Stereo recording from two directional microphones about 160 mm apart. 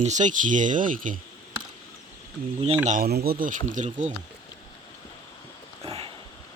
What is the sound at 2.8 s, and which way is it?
Speech, 55° right (ahead or behind).